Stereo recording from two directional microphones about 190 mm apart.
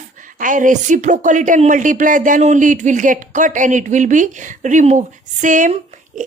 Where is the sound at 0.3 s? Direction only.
45° right (ahead or behind).